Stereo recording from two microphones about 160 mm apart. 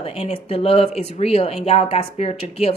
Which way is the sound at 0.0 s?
40° left (ahead or behind).